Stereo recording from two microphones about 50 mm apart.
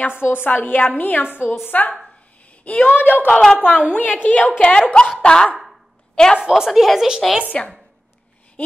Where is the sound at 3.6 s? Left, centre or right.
Centre.